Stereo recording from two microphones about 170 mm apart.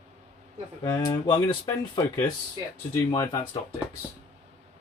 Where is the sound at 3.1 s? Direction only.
20° left (ahead or behind).